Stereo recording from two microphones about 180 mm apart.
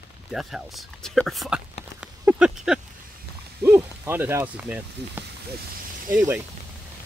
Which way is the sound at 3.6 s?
10° right (ahead or behind).